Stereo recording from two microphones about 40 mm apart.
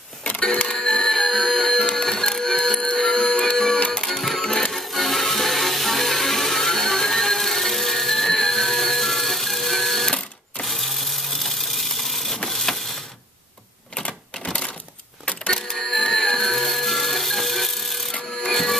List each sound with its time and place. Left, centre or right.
0.2 s a sound: left
0.7 s music: centre
1.9 s a sound: centre
3.5 s music: centre
4.7 s music: centre
10.6 s a sound: centre
12.4 s printer: centre
13.9 s typewriter: left
15.2 s printer: left
15.7 s music: centre
18.5 s printer: centre